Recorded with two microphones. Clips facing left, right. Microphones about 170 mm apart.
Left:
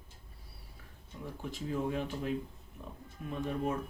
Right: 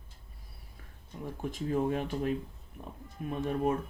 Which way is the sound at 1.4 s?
50° right (ahead or behind).